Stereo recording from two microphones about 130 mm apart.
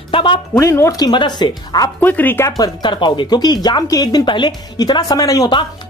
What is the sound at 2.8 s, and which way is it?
Speech, 35° left (ahead or behind).